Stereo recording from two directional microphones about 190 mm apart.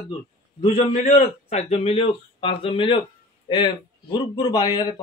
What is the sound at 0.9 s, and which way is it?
A man's voice, 40° left (ahead or behind).